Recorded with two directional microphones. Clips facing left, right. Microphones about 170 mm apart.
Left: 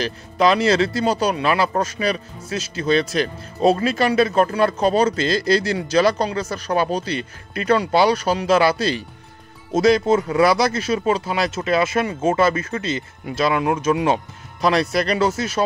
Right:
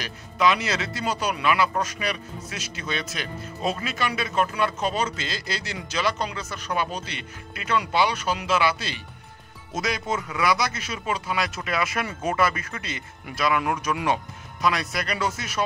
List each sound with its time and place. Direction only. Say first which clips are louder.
0.0 s speech: left 5 dB; 35° left (ahead or behind)